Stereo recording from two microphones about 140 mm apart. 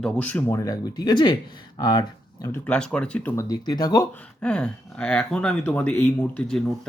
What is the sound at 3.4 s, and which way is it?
Speech, 30° left (ahead or behind).